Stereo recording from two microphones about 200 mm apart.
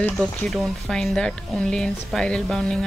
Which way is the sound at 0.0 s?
5° left (ahead or behind).